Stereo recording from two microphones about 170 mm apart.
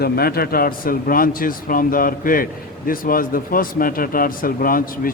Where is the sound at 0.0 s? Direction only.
65° left (ahead or behind).